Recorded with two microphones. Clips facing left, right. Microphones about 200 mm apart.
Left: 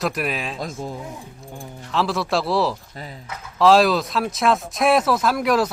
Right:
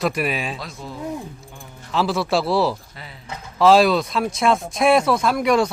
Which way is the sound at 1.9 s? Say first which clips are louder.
Right 2 dB; centre (ahead or behind).